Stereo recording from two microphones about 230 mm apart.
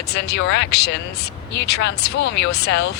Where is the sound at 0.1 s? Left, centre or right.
Left.